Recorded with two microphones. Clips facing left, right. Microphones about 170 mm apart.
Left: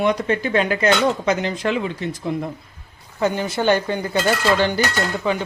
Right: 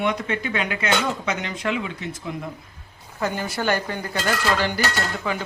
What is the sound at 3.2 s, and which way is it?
Speech, 20° left (ahead or behind).